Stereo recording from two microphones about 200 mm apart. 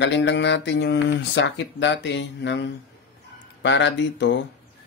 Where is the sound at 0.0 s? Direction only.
65° left (ahead or behind).